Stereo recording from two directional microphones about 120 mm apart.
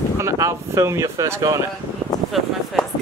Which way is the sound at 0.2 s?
25° right (ahead or behind).